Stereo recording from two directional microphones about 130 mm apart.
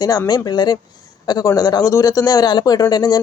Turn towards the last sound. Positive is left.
turn(degrees=30)  # may be behind; listen again after turning